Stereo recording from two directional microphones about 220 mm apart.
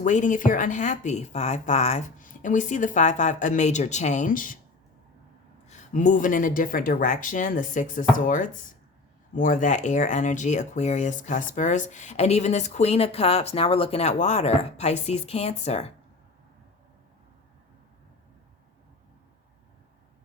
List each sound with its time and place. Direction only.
0.0 s speech: 35° left (ahead or behind)
5.6 s speech: 35° left (ahead or behind)